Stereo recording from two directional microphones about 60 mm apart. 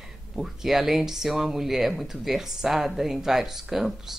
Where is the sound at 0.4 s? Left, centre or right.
Centre.